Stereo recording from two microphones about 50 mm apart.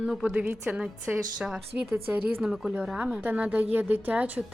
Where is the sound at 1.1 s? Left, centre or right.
Right.